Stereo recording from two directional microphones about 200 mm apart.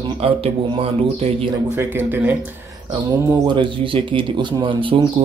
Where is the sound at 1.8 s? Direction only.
10° right (ahead or behind).